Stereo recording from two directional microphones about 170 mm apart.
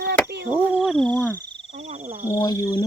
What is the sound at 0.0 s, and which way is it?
Cricket, 75° right (ahead or behind).